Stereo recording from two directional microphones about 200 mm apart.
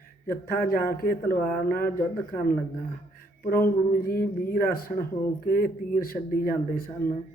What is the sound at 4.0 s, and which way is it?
Speech, 45° left (ahead or behind).